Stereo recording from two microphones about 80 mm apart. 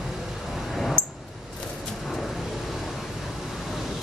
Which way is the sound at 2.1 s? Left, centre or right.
Centre.